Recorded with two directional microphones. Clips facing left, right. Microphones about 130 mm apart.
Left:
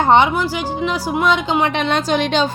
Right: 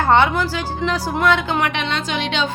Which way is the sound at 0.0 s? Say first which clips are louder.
Left 2 dB; 20° left (ahead or behind).